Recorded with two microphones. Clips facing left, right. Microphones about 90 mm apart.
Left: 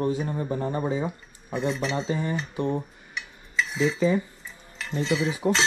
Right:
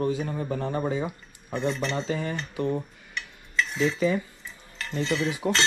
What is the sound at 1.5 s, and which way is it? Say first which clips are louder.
Speech: left 1 dB; centre (ahead or behind).